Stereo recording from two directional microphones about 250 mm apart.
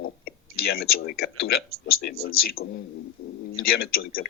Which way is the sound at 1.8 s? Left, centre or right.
Left.